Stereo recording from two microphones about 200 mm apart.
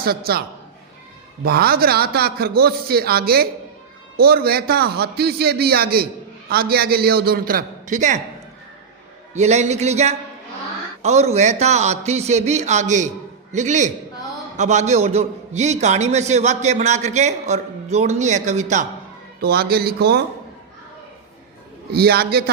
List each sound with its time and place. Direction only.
0.0 s a man's voice: 50° right (ahead or behind)
1.5 s a man's voice: 50° right (ahead or behind)
9.3 s a man's voice: 35° right (ahead or behind)
19.4 s a man's voice: 50° right (ahead or behind)
21.9 s a man's voice: 50° right (ahead or behind)